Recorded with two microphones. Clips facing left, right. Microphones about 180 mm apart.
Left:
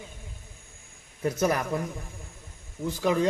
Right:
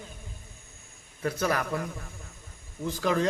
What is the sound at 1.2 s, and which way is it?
Speech, 20° left (ahead or behind).